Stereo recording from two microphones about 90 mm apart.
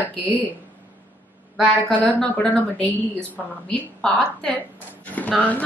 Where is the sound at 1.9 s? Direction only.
15° left (ahead or behind).